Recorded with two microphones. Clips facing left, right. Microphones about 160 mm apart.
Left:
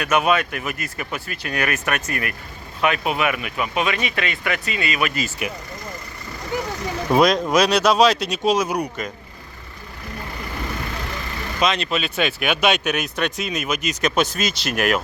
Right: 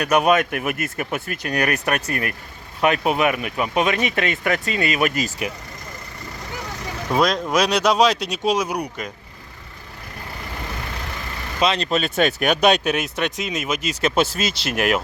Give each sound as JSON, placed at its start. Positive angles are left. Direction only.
{"t": 0.0, "sound": "speech", "side_deg": -40}
{"t": 7.1, "sound": "speech", "side_deg": 15}
{"t": 7.5, "sound": "speech", "side_deg": -15}
{"t": 11.6, "sound": "speech", "side_deg": -35}